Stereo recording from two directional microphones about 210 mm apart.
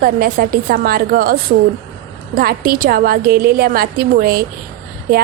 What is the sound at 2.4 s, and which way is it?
A woman's voice, 45° right (ahead or behind).